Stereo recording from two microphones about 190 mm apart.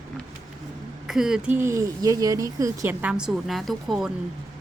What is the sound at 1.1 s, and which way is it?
Speech, 5° right (ahead or behind).